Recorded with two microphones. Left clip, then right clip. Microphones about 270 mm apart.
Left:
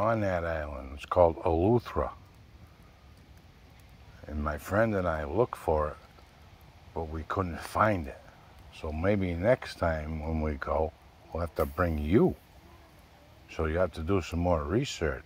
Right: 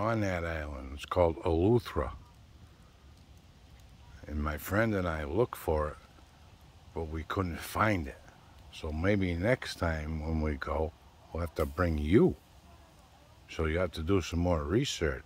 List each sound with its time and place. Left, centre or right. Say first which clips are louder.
0.0 s speech: left 4 dB; centre
4.3 s speech: left 3 dB; centre
6.9 s speech: left 2 dB; right
13.5 s speech: left 3 dB; centre